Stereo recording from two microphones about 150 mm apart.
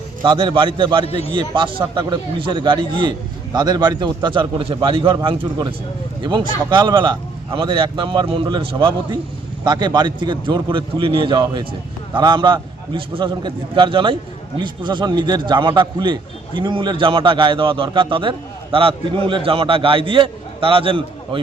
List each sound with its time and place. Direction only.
0.2 s a man's voice: 35° right (ahead or behind)